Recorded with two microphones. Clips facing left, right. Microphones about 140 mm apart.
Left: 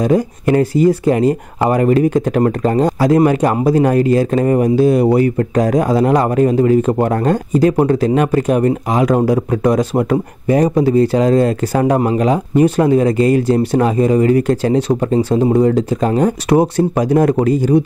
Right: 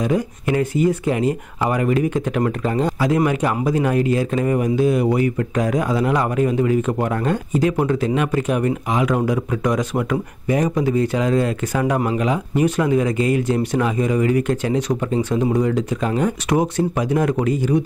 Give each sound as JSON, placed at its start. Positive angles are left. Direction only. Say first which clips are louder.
{"t": 0.0, "sound": "speech", "louder": "left 6 dB", "side_deg": 40}